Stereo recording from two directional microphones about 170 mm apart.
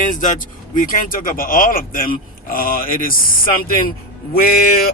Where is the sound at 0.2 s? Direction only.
50° left (ahead or behind).